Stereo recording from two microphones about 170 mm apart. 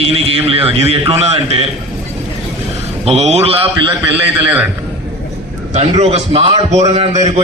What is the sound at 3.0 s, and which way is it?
Speech, 40° right (ahead or behind).